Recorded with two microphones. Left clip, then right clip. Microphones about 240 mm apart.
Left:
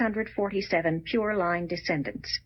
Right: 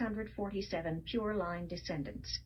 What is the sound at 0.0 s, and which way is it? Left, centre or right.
A woman's voice, left.